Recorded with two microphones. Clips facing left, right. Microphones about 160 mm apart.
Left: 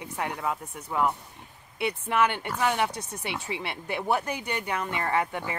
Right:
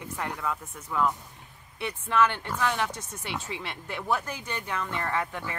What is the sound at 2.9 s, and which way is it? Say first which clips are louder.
Speech: left 2 dB; 65° left (ahead or behind).